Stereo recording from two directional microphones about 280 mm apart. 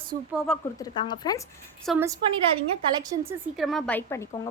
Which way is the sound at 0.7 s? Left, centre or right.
Centre.